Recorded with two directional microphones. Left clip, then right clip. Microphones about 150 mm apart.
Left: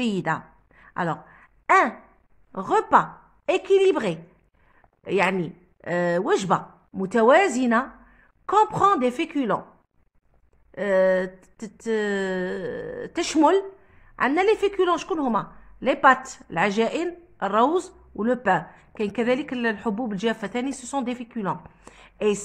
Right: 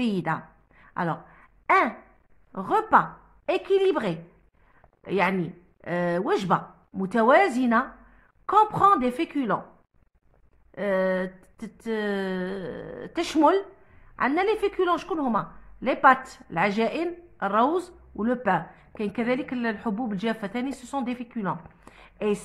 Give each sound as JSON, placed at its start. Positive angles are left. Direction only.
{"t": 0.0, "sound": "a sound", "side_deg": 35}
{"t": 2.5, "sound": "a woman's voice", "side_deg": 35}
{"t": 10.7, "sound": "a woman's voice", "side_deg": 35}